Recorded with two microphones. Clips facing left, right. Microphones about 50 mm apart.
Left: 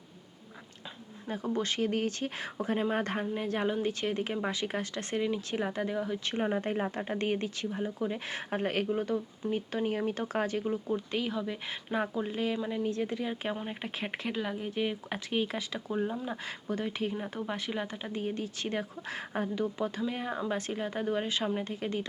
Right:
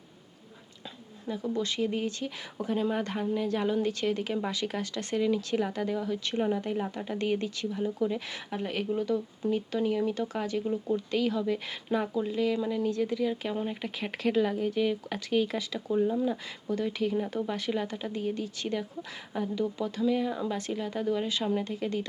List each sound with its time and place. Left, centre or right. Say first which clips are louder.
1.3 s speech: right 1 dB; left
6.5 s speech: right 1 dB; left; by 8.2 s centre
8.3 s speech: left 2 dB; left
9.0 s speech: right 2 dB; left
10.9 s speech: right 4 dB; left
12.5 s speech: right 3 dB; left
14.3 s speech: right 10 dB; centre
18.1 s speech: right 2 dB; left